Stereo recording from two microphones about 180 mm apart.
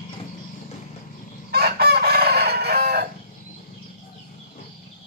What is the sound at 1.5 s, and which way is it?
Chicken, 60° right (ahead or behind).